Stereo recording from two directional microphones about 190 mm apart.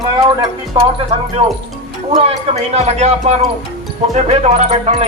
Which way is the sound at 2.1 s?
35° right (ahead or behind).